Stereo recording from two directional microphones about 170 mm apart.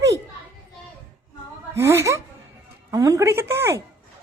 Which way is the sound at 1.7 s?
15° right (ahead or behind).